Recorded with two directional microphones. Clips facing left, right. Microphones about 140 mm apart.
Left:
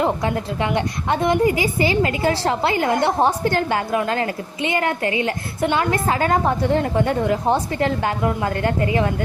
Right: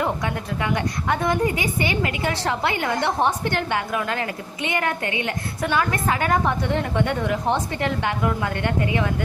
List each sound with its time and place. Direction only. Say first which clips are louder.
0.0 s a woman's voice: left 4 dB; 30° left (ahead or behind)